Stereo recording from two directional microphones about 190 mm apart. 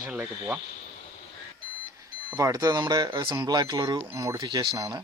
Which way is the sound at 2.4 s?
20° right (ahead or behind).